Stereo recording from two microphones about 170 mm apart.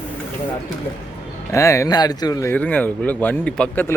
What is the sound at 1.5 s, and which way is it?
Speech, 15° left (ahead or behind).